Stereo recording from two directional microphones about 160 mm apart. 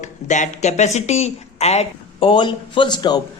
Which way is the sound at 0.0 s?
50° left (ahead or behind).